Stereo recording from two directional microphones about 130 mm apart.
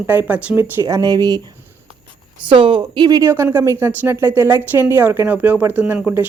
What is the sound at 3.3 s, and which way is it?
Speech, 20° right (ahead or behind).